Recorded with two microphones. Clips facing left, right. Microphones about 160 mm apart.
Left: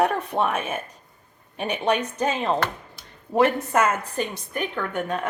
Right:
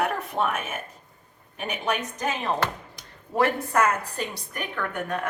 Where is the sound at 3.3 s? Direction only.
20° left (ahead or behind).